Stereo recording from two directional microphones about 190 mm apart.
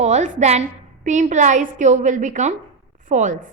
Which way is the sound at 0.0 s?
40° right (ahead or behind).